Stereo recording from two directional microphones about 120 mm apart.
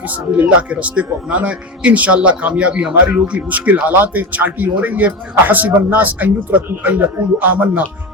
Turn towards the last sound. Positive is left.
turn(degrees=-15)  # may be behind; listen again after turning